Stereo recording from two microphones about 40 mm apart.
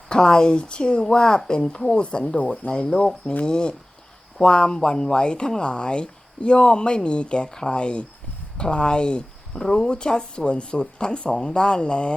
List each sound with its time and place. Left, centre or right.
0.1 s speech: centre
2.9 s speech: centre
3.4 s speech: left